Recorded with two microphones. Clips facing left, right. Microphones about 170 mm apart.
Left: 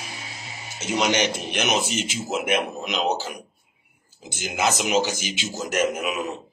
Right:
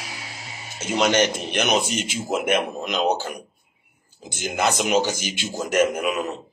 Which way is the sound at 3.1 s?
5° left (ahead or behind).